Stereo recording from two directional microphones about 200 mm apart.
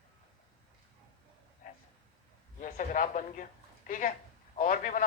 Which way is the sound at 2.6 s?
40° left (ahead or behind).